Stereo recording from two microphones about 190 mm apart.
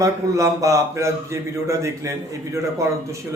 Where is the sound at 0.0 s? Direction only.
15° right (ahead or behind).